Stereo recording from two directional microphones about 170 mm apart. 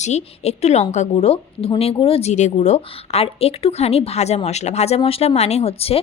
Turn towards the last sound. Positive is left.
turn(degrees=35)  # may be behind; listen again after turning